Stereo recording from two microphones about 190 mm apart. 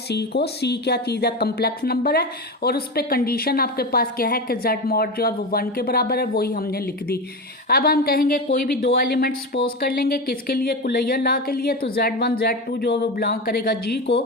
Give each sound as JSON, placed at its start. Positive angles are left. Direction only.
{"t": 0.1, "sound": "speech", "side_deg": 60}